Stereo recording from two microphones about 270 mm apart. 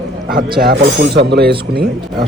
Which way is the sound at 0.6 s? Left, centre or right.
Right.